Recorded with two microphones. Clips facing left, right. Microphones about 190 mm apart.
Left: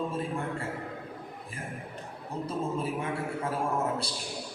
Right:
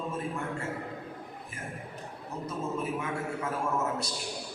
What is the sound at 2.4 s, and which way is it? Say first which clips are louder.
Speech: left 1 dB; 30° left (ahead or behind).